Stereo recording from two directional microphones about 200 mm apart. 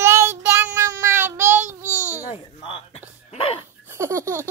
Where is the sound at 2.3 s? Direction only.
30° left (ahead or behind).